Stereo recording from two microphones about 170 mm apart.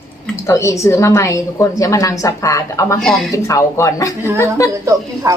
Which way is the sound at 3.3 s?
15° left (ahead or behind).